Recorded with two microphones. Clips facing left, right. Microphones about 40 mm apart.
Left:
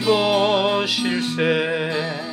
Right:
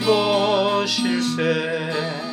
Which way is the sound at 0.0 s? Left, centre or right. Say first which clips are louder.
Even; centre.